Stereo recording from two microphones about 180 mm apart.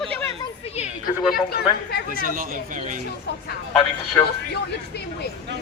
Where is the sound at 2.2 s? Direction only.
50° right (ahead or behind).